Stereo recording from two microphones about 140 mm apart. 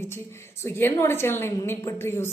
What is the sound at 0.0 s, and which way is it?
A woman's voice, 20° left (ahead or behind).